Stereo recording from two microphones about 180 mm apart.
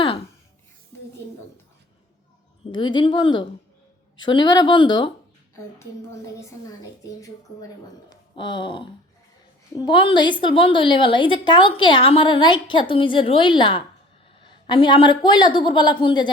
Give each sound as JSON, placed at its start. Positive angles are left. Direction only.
{"t": 2.7, "sound": "a woman's voice", "side_deg": 25}
{"t": 8.1, "sound": "a sound", "side_deg": 25}
{"t": 9.7, "sound": "a woman's voice", "side_deg": 25}